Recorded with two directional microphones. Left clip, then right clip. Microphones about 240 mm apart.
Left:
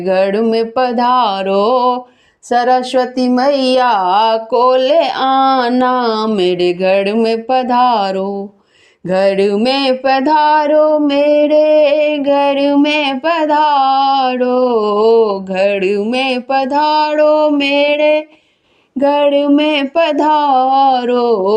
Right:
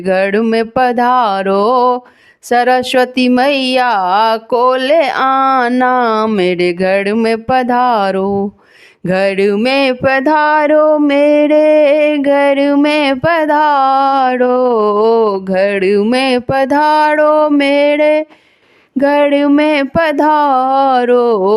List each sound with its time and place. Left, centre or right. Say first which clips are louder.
0.1 s speech: even; right
0.3 s mantra: right 1 dB; right
2.5 s speech: right 1 dB; right
4.8 s mantra: even; right
5.2 s speech: right 1 dB; right
6.3 s mantra: even; right
6.8 s speech: left 1 dB; right
7.3 s mantra: right 1 dB; right
8.2 s speech: right 5 dB; right
10.2 s mantra: even; right
18.9 s speech: right 1 dB; right
19.5 s mantra: right 1 dB; right